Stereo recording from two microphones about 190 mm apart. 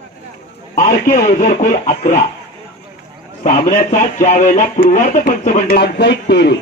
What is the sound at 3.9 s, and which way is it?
A man's voice, 40° left (ahead or behind).